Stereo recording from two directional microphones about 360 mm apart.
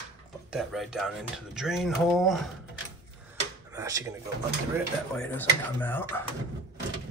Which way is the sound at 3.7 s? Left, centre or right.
Centre.